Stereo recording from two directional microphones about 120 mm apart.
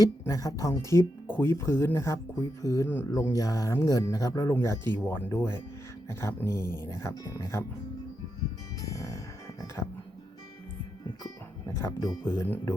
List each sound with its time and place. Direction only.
0.0 s speech: 30° left (ahead or behind)
8.8 s music: 30° left (ahead or behind)
11.7 s speech: 25° left (ahead or behind)